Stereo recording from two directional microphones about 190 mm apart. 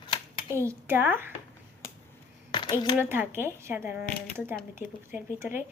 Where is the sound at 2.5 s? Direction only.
25° left (ahead or behind).